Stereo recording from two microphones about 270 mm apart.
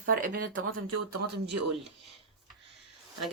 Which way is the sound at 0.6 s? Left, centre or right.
Right.